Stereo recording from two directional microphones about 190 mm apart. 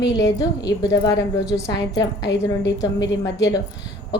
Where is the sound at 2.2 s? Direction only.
70° left (ahead or behind).